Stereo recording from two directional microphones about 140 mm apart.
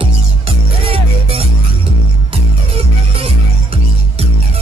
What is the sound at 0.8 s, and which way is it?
Music, 40° right (ahead or behind).